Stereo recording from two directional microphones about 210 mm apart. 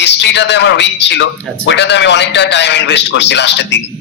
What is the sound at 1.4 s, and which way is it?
Speech, 5° left (ahead or behind).